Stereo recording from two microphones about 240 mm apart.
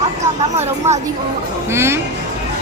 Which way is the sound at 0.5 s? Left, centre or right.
Right.